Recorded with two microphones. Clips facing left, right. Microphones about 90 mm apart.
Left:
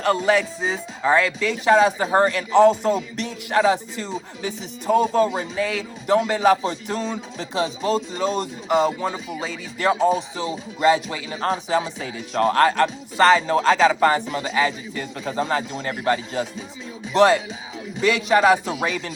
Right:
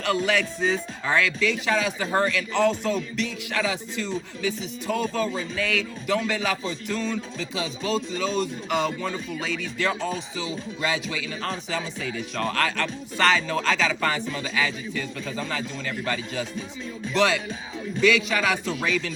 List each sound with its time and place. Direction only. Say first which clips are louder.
0.3 s a man's voice: left 3 dB; 30° left (ahead or behind)
10.2 s a man's voice: left 4 dB; 40° left (ahead or behind)
14.3 s a man's voice: left 5 dB; 25° left (ahead or behind)